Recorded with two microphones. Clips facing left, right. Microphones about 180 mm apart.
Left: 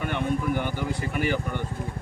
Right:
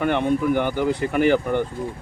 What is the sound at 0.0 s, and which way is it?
Speech, 60° right (ahead or behind).